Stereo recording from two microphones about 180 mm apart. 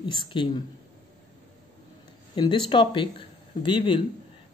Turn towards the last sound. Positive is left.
turn(degrees=25)  # may be behind; listen again after turning